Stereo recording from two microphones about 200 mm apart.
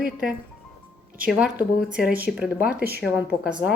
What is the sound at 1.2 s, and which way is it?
Speech, 5° right (ahead or behind).